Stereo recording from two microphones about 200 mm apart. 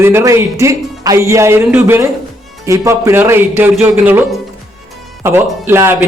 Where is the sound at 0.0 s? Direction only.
10° right (ahead or behind).